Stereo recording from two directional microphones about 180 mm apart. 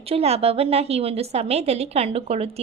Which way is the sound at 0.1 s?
35° right (ahead or behind).